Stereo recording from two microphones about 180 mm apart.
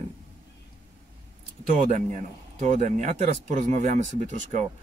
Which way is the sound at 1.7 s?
45° right (ahead or behind).